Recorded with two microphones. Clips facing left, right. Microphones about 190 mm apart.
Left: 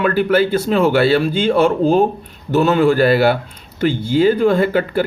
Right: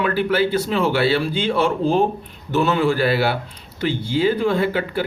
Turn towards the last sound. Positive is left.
turn(degrees=45)  # may be behind; listen again after turning